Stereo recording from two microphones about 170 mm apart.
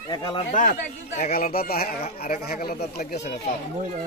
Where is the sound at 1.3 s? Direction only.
55° left (ahead or behind).